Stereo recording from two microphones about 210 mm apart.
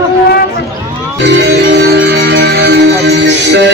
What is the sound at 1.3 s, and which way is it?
Music, 55° right (ahead or behind).